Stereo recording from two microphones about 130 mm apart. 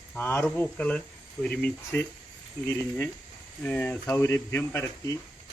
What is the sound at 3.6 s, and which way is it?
Speech, 15° left (ahead or behind).